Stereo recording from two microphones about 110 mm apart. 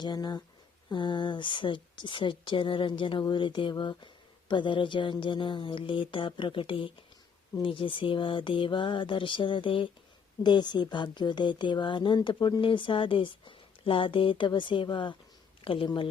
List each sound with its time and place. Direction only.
0.0 s a woman's voice: 40° left (ahead or behind)